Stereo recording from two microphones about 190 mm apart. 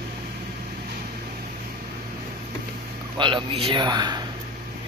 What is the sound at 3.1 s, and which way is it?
A man's voice, 25° right (ahead or behind).